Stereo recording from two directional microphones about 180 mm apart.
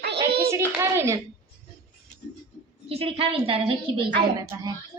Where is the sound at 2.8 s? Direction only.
30° right (ahead or behind).